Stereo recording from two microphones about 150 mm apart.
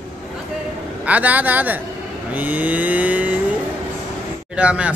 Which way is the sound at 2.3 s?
10° right (ahead or behind).